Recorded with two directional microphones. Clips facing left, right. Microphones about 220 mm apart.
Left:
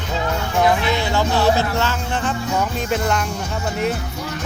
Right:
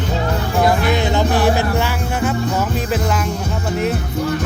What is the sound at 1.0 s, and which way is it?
Music, 15° right (ahead or behind).